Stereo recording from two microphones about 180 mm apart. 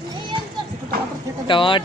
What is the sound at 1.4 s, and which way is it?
Speech, 25° left (ahead or behind).